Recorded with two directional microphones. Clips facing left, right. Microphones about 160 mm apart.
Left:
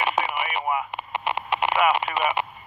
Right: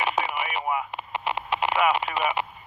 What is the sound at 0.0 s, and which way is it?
Radio, 60° left (ahead or behind).